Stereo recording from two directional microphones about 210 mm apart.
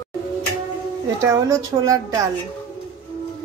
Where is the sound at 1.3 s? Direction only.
15° right (ahead or behind).